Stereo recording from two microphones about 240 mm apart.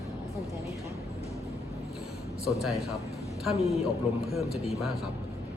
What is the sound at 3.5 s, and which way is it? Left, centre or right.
Speech, left.